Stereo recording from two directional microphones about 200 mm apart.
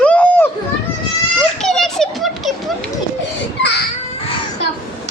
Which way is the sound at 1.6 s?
Centre (ahead or behind).